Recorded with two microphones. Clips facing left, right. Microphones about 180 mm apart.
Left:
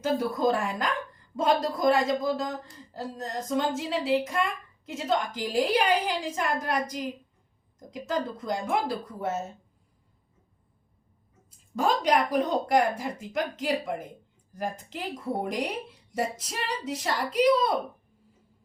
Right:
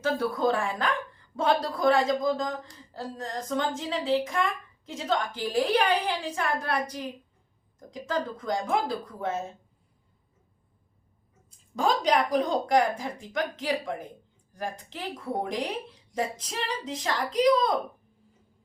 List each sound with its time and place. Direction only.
0.0 s a woman's voice: 10° left (ahead or behind)
11.8 s a woman's voice: 5° left (ahead or behind)